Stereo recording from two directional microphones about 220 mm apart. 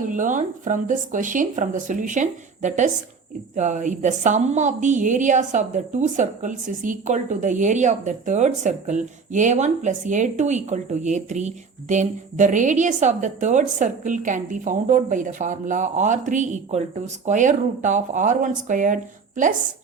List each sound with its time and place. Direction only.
0.1 s a woman's voice: 35° right (ahead or behind)